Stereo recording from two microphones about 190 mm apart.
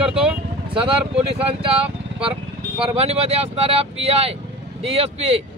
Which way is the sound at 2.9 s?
35° right (ahead or behind).